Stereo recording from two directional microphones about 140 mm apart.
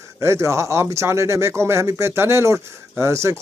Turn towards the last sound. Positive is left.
turn(degrees=-20)  # may be behind; listen again after turning